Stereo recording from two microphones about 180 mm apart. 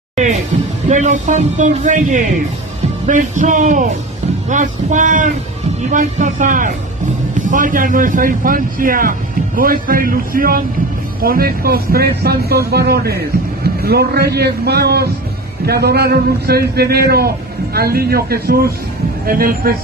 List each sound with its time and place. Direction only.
0.1 s music: 40° right (ahead or behind)
0.8 s speech: 40° right (ahead or behind)